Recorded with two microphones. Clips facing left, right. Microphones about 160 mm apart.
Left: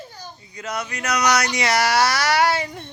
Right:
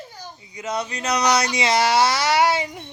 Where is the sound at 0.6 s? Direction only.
30° right (ahead or behind).